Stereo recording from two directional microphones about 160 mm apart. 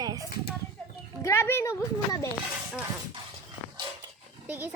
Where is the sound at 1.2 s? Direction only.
15° left (ahead or behind).